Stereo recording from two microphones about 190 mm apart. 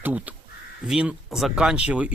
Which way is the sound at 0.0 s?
10° right (ahead or behind).